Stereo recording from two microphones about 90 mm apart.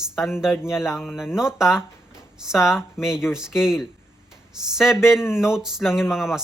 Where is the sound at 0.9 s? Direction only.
5° right (ahead or behind).